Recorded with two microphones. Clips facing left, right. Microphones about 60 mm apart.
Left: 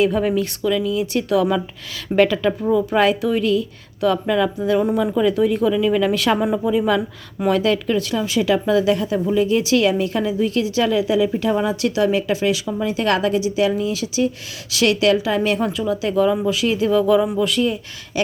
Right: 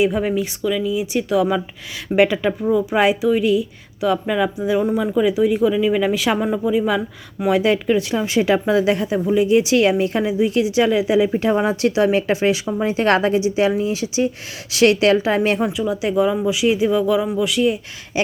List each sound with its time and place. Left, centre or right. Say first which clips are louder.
0.0 s speech: left 1 dB; centre
2.5 s speech: even; centre
2.9 s speech: right 1 dB; centre
7.6 s a woman's voice: right 2 dB; centre
15.6 s speech: right 1 dB; centre